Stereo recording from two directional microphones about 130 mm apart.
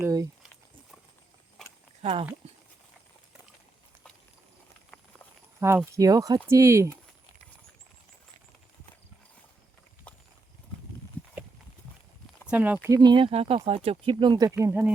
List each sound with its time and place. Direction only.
0.0 s walk: 25° right (ahead or behind)
2.0 s speech: 50° right (ahead or behind)
2.4 s a sound: 50° right (ahead or behind)
5.5 s speech: 20° right (ahead or behind)
12.5 s speech: 10° right (ahead or behind)
12.9 s speech: 35° right (ahead or behind)
14.6 s speech: 15° right (ahead or behind)